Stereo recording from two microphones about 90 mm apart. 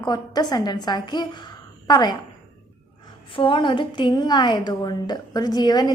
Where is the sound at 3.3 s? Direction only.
70° left (ahead or behind).